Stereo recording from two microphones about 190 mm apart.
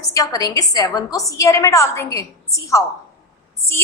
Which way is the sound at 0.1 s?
15° left (ahead or behind).